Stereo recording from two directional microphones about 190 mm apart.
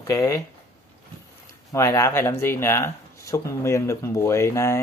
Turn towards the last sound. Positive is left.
turn(degrees=15)  # may be behind; listen again after turning